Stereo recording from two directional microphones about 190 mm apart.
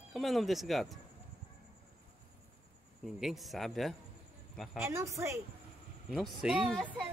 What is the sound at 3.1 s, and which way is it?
Speech, centre (ahead or behind).